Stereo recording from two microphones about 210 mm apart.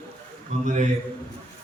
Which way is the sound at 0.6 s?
35° right (ahead or behind).